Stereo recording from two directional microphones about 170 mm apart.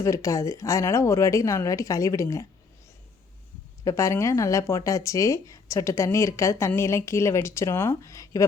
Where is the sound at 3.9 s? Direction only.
15° left (ahead or behind).